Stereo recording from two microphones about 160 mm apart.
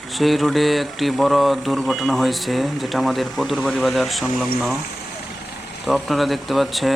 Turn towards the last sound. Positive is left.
turn(degrees=0)  # may be behind; listen again after turning